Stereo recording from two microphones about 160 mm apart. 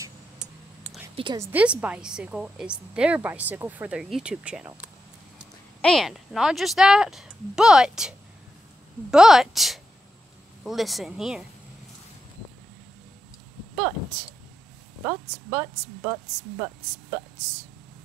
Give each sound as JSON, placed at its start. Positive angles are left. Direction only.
{"t": 1.1, "sound": "a woman's voice", "side_deg": -30}
{"t": 1.4, "sound": "a woman's voice", "side_deg": -10}
{"t": 5.8, "sound": "speech", "side_deg": 5}
{"t": 9.1, "sound": "speech", "side_deg": -5}
{"t": 15.0, "sound": "a woman's voice", "side_deg": -20}